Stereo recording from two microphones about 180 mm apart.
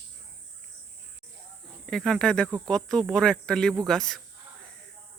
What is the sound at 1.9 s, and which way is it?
Speech, 5° left (ahead or behind).